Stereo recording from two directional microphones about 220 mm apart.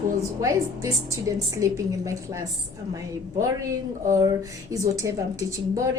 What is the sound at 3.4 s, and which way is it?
A woman's voice, 15° right (ahead or behind).